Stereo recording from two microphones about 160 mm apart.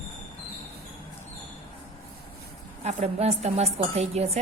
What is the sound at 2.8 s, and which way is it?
A woman's voice, 40° right (ahead or behind).